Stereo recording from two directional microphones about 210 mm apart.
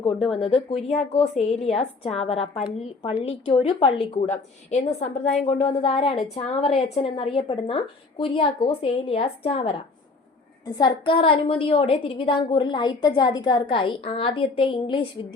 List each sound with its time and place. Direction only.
0.3 s a woman's voice: 25° left (ahead or behind)